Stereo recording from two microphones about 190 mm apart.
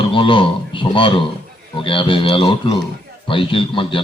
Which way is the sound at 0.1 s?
25° left (ahead or behind).